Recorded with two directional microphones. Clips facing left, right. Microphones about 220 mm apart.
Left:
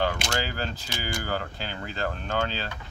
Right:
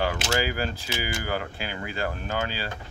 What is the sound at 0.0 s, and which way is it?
Speech, 5° right (ahead or behind).